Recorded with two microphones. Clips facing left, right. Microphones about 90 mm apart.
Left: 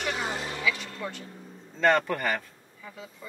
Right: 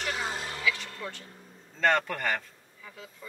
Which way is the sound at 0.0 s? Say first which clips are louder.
Left 2 dB; 20° left (ahead or behind).